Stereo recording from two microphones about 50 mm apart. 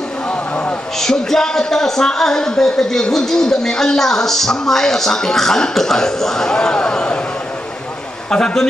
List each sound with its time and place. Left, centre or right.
0.9 s a man's voice: centre
8.3 s a man's voice: centre